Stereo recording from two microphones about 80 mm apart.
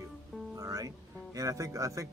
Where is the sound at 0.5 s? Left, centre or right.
Right.